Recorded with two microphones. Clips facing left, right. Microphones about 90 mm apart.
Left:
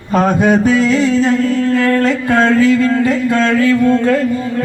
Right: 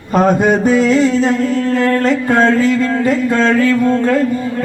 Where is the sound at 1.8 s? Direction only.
30° right (ahead or behind).